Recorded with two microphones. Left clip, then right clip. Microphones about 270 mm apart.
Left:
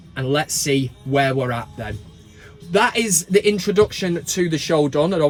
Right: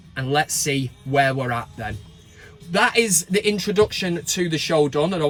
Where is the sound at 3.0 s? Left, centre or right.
Centre.